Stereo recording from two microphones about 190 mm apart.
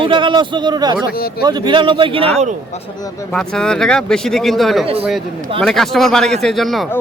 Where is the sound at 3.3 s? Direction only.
5° left (ahead or behind).